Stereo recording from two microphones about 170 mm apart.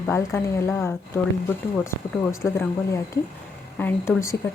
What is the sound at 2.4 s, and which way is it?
Speech, 15° left (ahead or behind).